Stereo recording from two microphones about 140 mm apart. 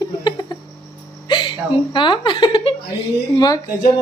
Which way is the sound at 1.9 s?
35° left (ahead or behind).